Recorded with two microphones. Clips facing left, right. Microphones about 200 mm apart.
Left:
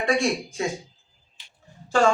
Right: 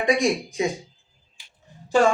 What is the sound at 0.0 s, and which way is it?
Speech, 15° right (ahead or behind).